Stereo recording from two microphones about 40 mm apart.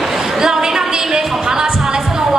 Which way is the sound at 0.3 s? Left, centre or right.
Centre.